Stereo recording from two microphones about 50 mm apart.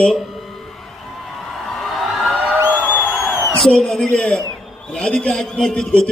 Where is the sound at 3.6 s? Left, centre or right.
Centre.